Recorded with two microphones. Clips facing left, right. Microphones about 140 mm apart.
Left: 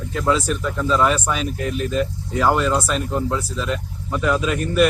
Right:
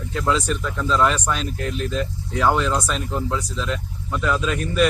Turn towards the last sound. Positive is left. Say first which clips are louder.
# left 2 dB
turn(degrees=5)  # may be behind; listen again after turning